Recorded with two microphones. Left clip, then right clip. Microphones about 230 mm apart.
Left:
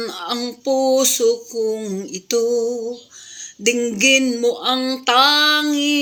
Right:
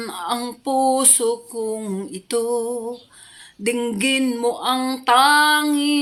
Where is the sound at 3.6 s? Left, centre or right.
Centre.